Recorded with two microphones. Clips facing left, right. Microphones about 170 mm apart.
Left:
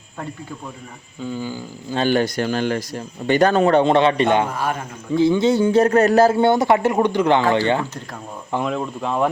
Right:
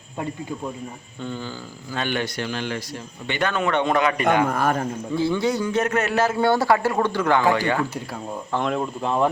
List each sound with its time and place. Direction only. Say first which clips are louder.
1.2 s speech: left 4 dB; 10° left (ahead or behind)
1.9 s speech: left 7 dB; 35° left (ahead or behind)
4.4 s a man's voice: right 2 dB; 50° right (ahead or behind)
5.1 s a man's voice: left 7 dB; 20° left (ahead or behind)
8.5 s speech: left 1 dB; centre (ahead or behind)